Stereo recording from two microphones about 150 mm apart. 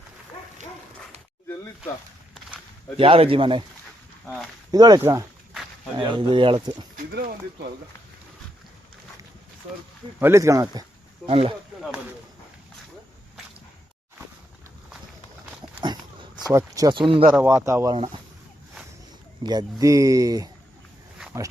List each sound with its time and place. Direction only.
3.0 s speech: 35° right (ahead or behind)
4.7 s speech: 25° right (ahead or behind)
6.0 s speech: 35° right (ahead or behind)
6.9 s speech: 90° right
10.2 s speech: 15° right (ahead or behind)
11.3 s speech: 40° right (ahead or behind)
15.8 s a sound: 30° right (ahead or behind)
16.5 s speech: 20° right (ahead or behind)
17.5 s speech: 20° right (ahead or behind)
17.9 s speech: 35° right (ahead or behind)
19.4 s speech: 30° right (ahead or behind)